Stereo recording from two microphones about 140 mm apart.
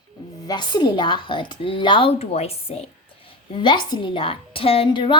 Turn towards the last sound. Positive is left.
turn(degrees=35)  # may be behind; listen again after turning